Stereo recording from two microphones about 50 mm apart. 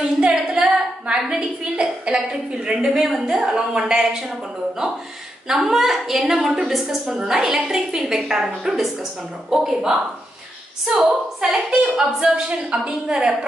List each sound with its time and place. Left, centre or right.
0.2 s a sound: centre
1.0 s a woman's voice: centre
11.0 s a woman's voice: centre
12.4 s a woman's voice: centre